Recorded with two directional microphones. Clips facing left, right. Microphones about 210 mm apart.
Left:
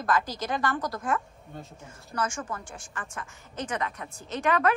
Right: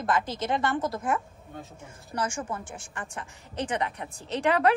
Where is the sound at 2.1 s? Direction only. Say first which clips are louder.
Right 1 dB; 30° right (ahead or behind).